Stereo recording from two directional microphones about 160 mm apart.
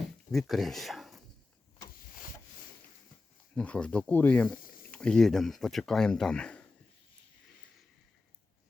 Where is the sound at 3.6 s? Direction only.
5° left (ahead or behind).